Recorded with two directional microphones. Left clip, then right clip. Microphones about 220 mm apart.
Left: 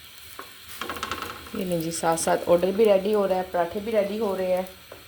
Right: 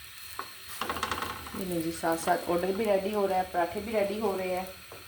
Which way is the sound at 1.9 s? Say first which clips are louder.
Left 6 dB; 40° left (ahead or behind).